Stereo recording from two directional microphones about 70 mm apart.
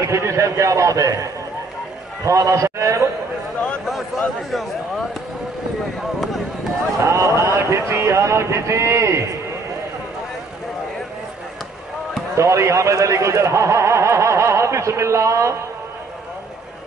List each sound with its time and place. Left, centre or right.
0.0 s a man's voice: right
4.5 s speech: centre
7.1 s speech: right
12.4 s speech: right